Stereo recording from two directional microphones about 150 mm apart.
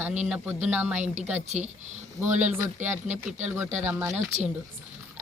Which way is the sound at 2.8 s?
50° right (ahead or behind).